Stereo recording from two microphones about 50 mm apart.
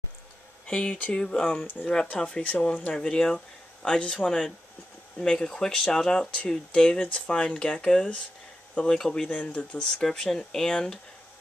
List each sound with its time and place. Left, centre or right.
0.7 s speech: left
1.6 s speech: left
1.9 s speech: centre
3.0 s speech: centre
9.3 s speech: left
10.0 s speech: centre